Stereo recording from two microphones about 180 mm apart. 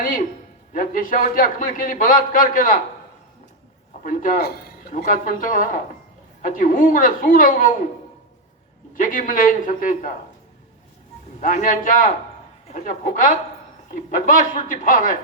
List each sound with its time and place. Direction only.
0.7 s a man's voice: 50° left (ahead or behind)
4.0 s a man's voice: 55° left (ahead or behind)
9.0 s a man's voice: 50° left (ahead or behind)
11.3 s a man's voice: 45° left (ahead or behind)